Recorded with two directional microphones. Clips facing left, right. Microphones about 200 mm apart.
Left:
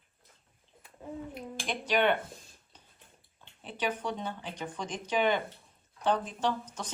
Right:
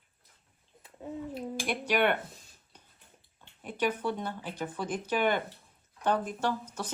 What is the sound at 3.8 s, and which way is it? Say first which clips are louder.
Speech: right 3 dB; 10° right (ahead or behind).